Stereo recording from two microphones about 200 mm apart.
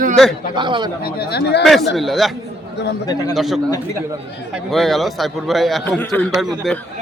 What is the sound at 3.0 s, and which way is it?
Speech, 20° left (ahead or behind).